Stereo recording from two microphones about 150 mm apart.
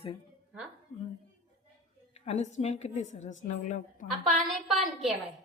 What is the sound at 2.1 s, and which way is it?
A woman's voice, 45° left (ahead or behind).